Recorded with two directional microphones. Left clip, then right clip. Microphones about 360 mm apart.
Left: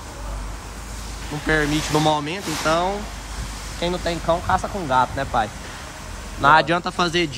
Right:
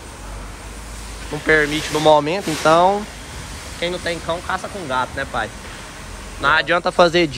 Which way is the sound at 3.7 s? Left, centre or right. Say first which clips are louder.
Right 1 dB; centre.